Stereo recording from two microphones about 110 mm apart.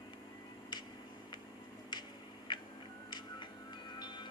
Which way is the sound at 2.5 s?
45° left (ahead or behind).